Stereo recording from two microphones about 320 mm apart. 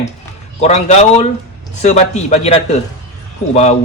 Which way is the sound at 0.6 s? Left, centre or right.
Left.